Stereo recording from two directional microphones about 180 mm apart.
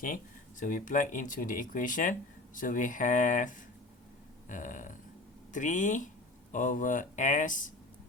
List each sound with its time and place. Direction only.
0.6 s speech: 45° left (ahead or behind)